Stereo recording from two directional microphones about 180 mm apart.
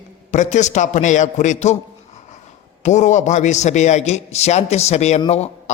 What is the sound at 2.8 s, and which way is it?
A man's voice, 40° left (ahead or behind).